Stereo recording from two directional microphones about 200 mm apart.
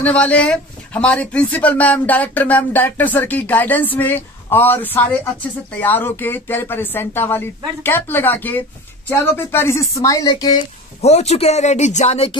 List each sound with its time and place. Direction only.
0.0 s speech: 5° left (ahead or behind)
11.1 s speech: 30° left (ahead or behind)